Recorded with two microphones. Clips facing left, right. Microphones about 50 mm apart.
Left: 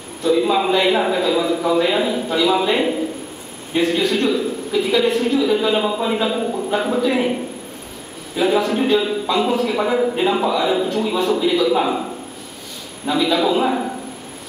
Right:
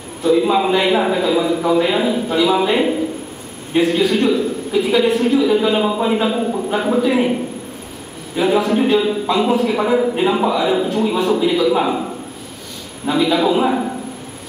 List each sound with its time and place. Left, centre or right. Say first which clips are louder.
0.2 s a man's voice: right 2 dB; centre